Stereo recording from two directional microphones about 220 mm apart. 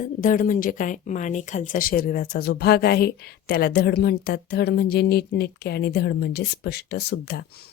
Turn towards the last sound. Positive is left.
turn(degrees=45)  # may be behind; listen again after turning